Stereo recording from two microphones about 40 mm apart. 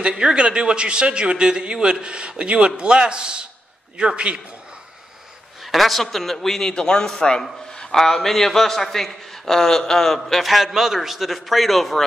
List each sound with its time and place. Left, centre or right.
0.2 s a man's voice: right
5.7 s a man's voice: centre
6.7 s a man's voice: left; by 12.0 s centre